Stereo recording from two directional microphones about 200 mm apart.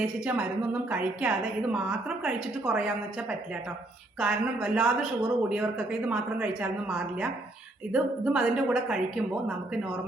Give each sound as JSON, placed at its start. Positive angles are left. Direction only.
{"t": 0.0, "sound": "a woman's voice", "side_deg": -5}